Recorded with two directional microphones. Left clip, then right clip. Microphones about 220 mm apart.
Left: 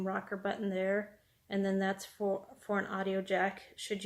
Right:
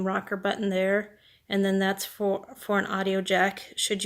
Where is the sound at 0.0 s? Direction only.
40° right (ahead or behind).